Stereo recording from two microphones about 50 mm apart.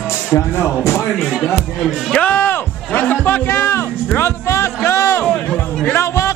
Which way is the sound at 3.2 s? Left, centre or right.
Left.